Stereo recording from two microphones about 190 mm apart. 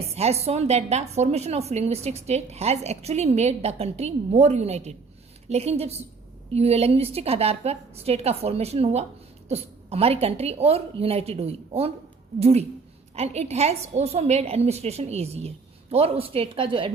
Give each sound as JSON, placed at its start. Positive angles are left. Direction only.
{"t": 0.1, "sound": "a woman's voice", "side_deg": -35}